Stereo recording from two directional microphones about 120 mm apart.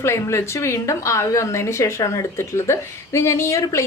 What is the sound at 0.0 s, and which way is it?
Speech, 20° left (ahead or behind).